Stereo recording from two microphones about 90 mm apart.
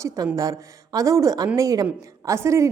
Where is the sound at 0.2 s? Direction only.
40° right (ahead or behind).